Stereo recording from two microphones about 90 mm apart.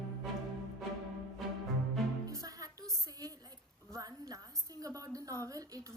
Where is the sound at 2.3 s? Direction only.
40° right (ahead or behind).